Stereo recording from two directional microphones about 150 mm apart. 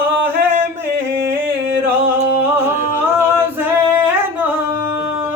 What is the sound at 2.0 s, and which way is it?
A capella, 15° right (ahead or behind).